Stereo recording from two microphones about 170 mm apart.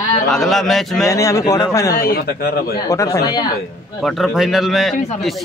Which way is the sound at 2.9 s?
20° left (ahead or behind).